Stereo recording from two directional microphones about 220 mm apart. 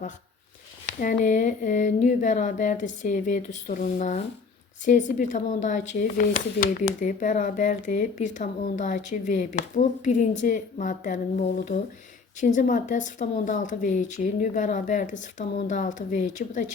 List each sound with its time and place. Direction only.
0.9 s speech: 35° left (ahead or behind)